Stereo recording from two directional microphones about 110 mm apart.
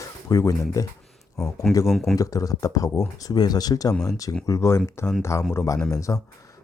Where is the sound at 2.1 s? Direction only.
30° left (ahead or behind).